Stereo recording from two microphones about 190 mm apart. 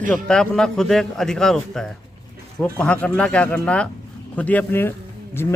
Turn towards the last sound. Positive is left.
turn(degrees=15)  # may be behind; listen again after turning